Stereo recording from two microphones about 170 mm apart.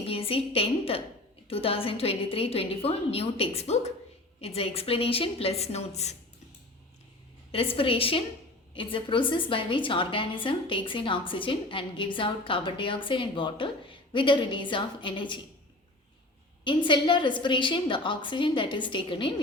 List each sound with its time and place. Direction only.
0.0 s a woman's voice: 35° left (ahead or behind)
7.5 s a woman's voice: 35° left (ahead or behind)
16.6 s a woman's voice: 30° left (ahead or behind)